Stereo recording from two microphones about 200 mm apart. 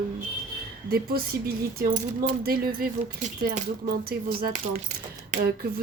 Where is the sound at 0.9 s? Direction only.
50° right (ahead or behind).